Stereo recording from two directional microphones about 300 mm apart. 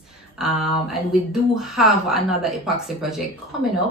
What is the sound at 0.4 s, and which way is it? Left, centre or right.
Speech, centre.